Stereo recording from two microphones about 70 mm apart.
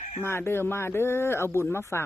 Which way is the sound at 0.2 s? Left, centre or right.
Left.